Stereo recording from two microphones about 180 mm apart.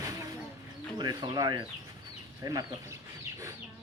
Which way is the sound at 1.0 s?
25° right (ahead or behind).